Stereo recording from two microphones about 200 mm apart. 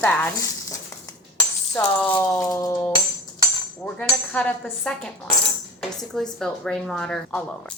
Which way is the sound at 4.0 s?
5° left (ahead or behind).